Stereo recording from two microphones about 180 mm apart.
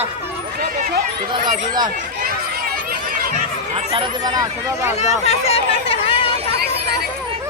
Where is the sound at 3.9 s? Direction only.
25° right (ahead or behind).